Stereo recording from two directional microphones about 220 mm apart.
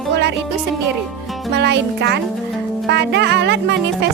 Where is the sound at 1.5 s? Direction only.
50° right (ahead or behind).